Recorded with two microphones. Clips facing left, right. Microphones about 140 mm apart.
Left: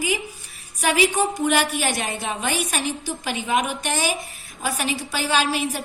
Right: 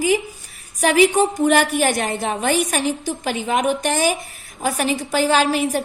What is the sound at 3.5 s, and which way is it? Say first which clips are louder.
A woman's voice: right 4 dB; 50° right (ahead or behind).